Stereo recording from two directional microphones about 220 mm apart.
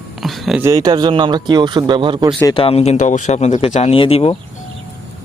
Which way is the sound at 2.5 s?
25° left (ahead or behind).